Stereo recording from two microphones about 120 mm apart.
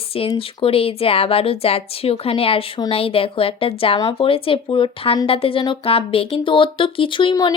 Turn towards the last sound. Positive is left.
turn(degrees=40)  # may be behind; listen again after turning